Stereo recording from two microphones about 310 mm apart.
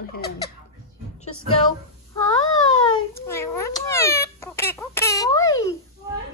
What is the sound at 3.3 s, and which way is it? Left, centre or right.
Speech, centre.